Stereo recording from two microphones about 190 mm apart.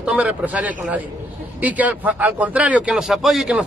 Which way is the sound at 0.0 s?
5° right (ahead or behind).